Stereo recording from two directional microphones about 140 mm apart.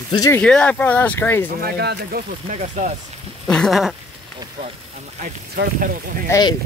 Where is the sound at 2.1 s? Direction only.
70° right (ahead or behind).